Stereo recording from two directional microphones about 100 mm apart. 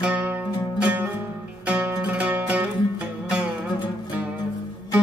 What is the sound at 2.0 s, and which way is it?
Music, 10° right (ahead or behind).